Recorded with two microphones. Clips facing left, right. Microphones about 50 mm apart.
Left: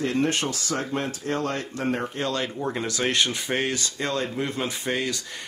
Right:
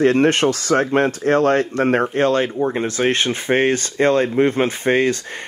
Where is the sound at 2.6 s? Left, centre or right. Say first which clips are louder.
Right 8 dB; right.